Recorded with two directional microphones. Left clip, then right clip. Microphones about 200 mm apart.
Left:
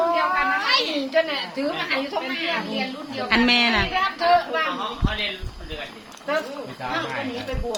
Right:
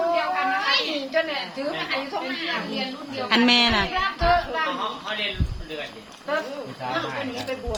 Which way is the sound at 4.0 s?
30° left (ahead or behind).